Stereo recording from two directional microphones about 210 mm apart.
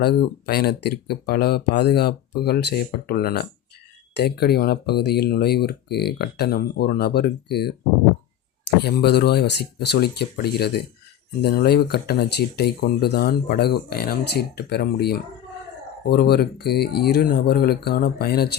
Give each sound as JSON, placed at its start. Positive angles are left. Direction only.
{"t": 0.0, "sound": "speech", "side_deg": 50}